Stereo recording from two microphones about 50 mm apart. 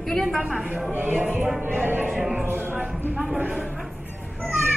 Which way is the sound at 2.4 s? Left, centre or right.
Right.